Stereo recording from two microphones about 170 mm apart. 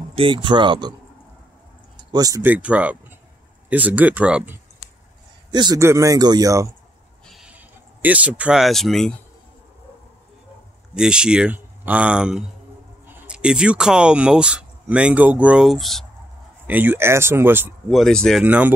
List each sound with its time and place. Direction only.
0.1 s speech: 30° right (ahead or behind)
2.1 s speech: 20° right (ahead or behind)
2.4 s speech: 10° right (ahead or behind)
5.5 s speech: 25° right (ahead or behind)
7.2 s a sound: 5° right (ahead or behind)
11.0 s a man's voice: 5° right (ahead or behind)
16.6 s speech: 10° right (ahead or behind)
17.8 s a man's voice: centre (ahead or behind)
18.4 s speech: 10° right (ahead or behind)